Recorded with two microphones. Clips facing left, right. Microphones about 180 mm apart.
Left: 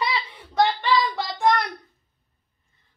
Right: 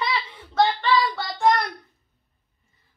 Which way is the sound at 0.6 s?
15° left (ahead or behind).